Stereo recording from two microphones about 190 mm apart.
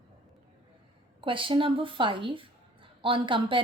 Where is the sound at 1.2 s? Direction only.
25° right (ahead or behind).